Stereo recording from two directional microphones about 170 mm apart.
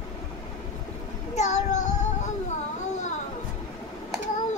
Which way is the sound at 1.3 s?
45° left (ahead or behind).